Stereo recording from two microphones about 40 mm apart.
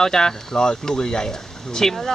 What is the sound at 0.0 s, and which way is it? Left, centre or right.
Speech, centre.